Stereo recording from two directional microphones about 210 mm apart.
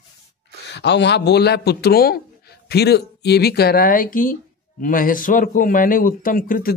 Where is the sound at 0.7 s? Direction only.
55° left (ahead or behind).